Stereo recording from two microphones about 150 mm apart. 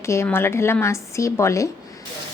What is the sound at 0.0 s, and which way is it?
Speech, 20° left (ahead or behind).